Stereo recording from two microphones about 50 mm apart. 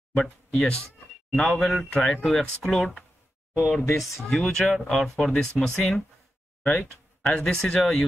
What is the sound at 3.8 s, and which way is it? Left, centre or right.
Speech, left.